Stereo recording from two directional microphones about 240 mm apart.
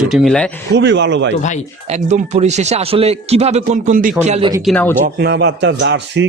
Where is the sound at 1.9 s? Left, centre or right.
Right.